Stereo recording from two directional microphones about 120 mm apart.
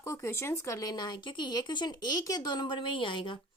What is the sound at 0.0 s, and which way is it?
A woman's voice, 25° left (ahead or behind).